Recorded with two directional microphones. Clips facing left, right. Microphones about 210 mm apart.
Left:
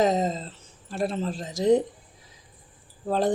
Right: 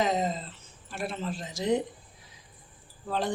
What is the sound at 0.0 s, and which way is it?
Speech, 40° left (ahead or behind).